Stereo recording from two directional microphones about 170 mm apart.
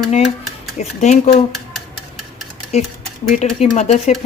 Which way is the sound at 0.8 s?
40° left (ahead or behind).